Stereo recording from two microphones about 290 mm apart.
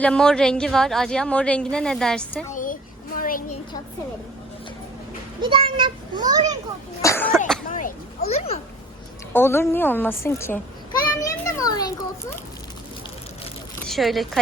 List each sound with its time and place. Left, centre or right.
0.0 s a woman's voice: centre
2.5 s a sound: left
5.4 s a child's voice: centre
7.0 s cough: centre
7.7 s a sound: left
9.3 s a woman's voice: centre
13.8 s speech: centre